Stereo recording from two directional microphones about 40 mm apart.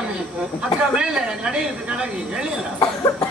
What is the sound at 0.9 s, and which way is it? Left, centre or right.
Speech, right.